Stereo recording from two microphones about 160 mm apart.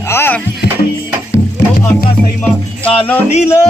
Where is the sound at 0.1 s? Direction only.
15° left (ahead or behind).